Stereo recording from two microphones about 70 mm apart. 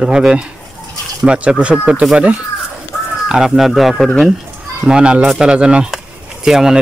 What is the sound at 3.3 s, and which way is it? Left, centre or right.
Speech, centre.